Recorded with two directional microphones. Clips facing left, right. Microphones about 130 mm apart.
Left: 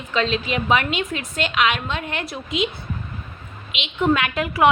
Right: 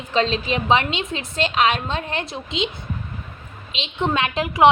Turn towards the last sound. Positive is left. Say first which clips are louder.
# right 2 dB
turn(degrees=-25)  # may be behind; listen again after turning